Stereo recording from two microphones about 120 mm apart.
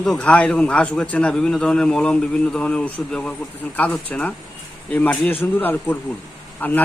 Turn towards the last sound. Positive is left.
turn(degrees=15)  # may be behind; listen again after turning